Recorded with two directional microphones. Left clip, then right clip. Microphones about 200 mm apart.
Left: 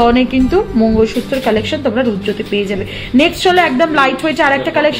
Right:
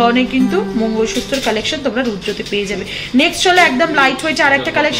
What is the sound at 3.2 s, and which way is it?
A woman's voice, 45° left (ahead or behind).